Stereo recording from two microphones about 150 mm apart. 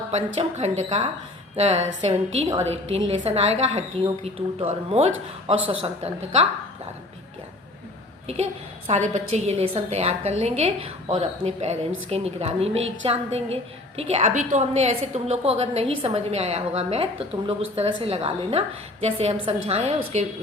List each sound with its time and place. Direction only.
0.3 s a woman's voice: 45° right (ahead or behind)
8.9 s a woman's voice: 50° right (ahead or behind)